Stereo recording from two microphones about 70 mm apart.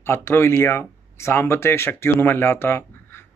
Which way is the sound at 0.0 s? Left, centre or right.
Left.